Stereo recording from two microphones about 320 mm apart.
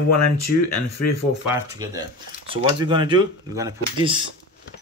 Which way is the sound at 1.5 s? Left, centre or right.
Centre.